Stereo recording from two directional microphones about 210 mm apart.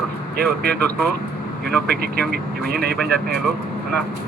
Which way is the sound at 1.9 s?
50° right (ahead or behind).